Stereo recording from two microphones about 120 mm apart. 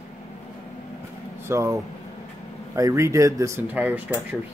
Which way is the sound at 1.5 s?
25° right (ahead or behind).